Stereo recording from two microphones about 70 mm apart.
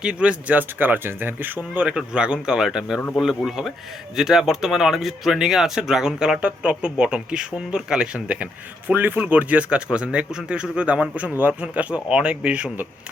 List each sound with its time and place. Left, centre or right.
0.0 s speech: centre
1.9 s speech: centre